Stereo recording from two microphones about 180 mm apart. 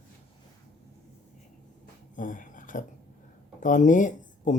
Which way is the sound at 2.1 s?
45° left (ahead or behind).